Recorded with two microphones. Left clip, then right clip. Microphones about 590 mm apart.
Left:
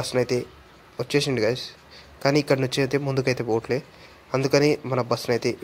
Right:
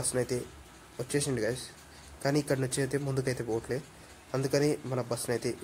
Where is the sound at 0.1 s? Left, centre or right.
Right.